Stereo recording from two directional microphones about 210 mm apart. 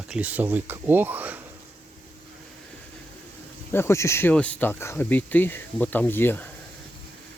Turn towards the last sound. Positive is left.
turn(degrees=10)  # may be behind; listen again after turning